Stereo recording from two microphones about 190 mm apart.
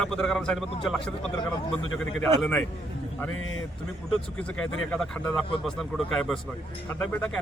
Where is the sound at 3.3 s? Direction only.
90° left.